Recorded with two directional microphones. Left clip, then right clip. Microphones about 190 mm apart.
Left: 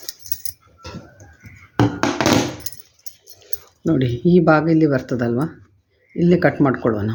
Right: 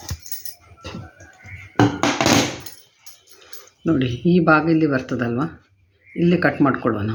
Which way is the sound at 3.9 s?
50° left (ahead or behind).